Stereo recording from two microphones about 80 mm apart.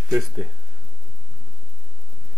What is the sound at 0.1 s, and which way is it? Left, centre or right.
Speech, centre.